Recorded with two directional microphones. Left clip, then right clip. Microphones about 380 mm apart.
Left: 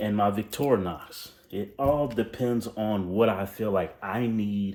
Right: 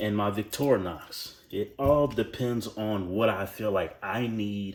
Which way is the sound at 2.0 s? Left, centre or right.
Centre.